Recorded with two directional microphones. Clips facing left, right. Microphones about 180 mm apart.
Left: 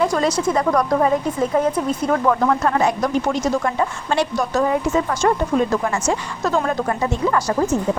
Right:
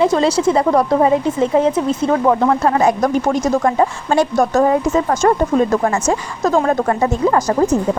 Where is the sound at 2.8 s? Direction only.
45° right (ahead or behind).